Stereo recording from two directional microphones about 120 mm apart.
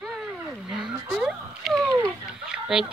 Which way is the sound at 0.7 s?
5° right (ahead or behind).